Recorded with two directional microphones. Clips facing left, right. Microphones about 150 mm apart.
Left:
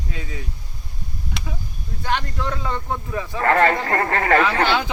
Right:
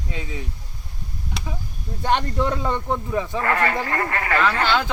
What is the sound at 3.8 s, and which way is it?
Speech, 50° left (ahead or behind).